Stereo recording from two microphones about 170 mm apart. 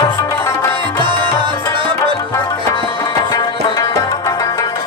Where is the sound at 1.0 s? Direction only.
30° right (ahead or behind).